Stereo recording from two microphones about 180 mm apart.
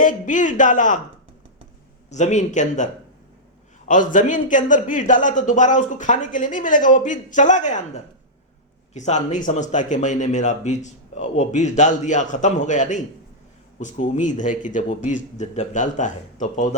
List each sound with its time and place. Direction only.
0.0 s speech: 45° left (ahead or behind)
2.0 s speech: 40° left (ahead or behind)